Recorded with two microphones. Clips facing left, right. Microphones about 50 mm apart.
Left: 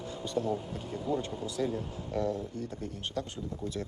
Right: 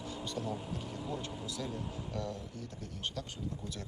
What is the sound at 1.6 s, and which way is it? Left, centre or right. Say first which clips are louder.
Speech: left 10 dB; left.